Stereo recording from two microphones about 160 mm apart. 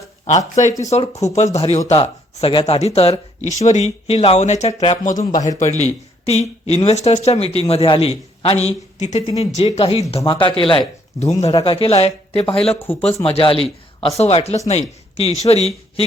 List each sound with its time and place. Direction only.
0.3 s speech: 45° left (ahead or behind)
5.0 s speech: 50° left (ahead or behind)
12.9 s speech: 5° left (ahead or behind)
13.2 s a man's voice: 35° left (ahead or behind)